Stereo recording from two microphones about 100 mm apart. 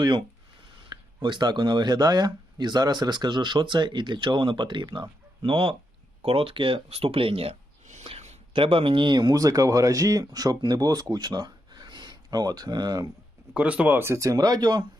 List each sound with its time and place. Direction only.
0.9 s speech: 50° right (ahead or behind)
9.3 s speech: 35° right (ahead or behind)
13.5 s speech: 15° right (ahead or behind); by 14.8 s 45° right (ahead or behind)